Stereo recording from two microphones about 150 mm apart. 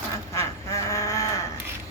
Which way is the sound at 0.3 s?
20° left (ahead or behind).